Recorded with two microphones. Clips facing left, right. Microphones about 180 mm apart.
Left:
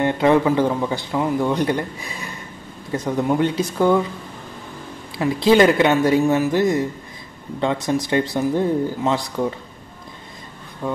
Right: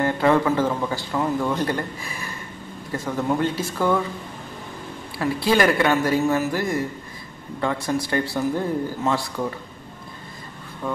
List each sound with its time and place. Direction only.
0.0 s a man's voice: 20° left (ahead or behind)
5.1 s speech: 20° left (ahead or behind)